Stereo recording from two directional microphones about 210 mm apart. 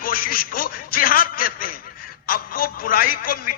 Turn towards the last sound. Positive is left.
turn(degrees=40)  # may be behind; listen again after turning